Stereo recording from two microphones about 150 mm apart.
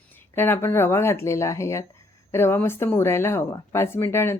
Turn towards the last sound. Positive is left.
turn(degrees=15)  # may be behind; listen again after turning